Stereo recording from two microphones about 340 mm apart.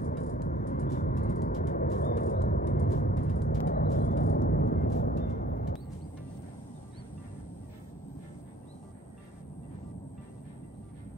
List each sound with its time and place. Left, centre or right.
0.0 s vehicle: left